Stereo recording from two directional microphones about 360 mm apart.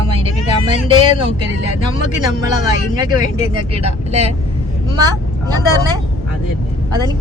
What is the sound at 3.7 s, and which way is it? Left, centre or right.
Speech, centre.